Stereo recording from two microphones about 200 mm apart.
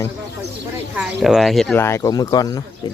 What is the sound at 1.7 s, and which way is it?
Speech, 15° left (ahead or behind).